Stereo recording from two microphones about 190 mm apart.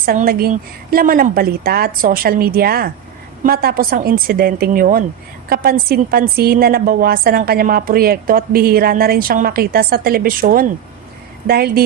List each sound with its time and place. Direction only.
0.0 s a woman's voice: 50° right (ahead or behind)